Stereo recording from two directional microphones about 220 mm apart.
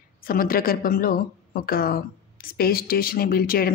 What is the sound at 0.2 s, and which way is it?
Speech, 40° left (ahead or behind).